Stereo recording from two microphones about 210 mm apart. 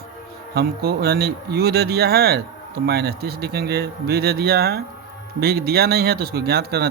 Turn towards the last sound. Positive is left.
turn(degrees=-50)  # may be behind; listen again after turning